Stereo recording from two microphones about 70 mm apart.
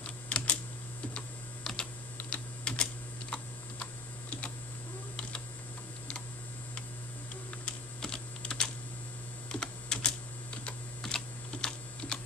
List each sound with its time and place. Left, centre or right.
0.0 s typing: centre
7.6 s typing: centre